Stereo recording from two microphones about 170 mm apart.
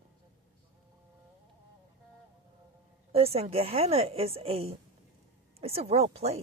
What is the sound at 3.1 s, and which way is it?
Speech, 35° right (ahead or behind).